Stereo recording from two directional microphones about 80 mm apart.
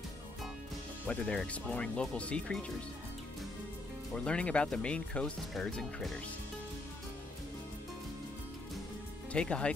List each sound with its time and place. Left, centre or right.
1.0 s speech: centre
4.1 s speech: centre
9.3 s speech: centre